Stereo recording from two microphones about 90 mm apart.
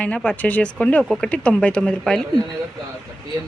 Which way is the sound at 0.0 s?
15° left (ahead or behind).